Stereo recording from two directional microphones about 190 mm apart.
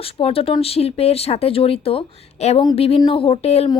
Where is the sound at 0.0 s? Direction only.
30° left (ahead or behind).